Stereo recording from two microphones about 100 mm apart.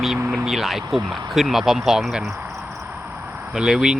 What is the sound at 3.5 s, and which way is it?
Speech, 5° right (ahead or behind).